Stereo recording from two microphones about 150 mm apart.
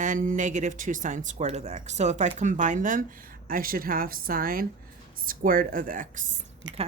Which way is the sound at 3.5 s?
70° right (ahead or behind).